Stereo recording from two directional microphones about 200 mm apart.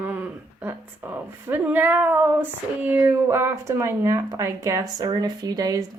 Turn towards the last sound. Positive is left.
turn(degrees=-20)  # may be behind; listen again after turning